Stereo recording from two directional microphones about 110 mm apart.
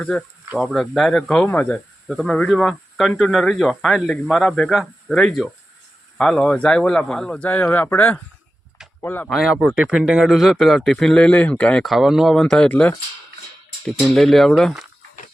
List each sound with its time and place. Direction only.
0.0 s speech: 10° left (ahead or behind)
0.6 s speech: centre (ahead or behind)
1.5 s speech: 15° left (ahead or behind)
2.0 s speech: centre (ahead or behind); by 9.3 s 20° left (ahead or behind)
9.3 s speech: 5° right (ahead or behind)
11.9 s speech: 5° right (ahead or behind); by 13.0 s 15° left (ahead or behind)
14.0 s speech: centre (ahead or behind)